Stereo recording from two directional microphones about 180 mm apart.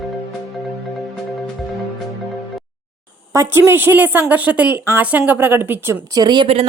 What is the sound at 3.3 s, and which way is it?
A woman's voice, 15° right (ahead or behind).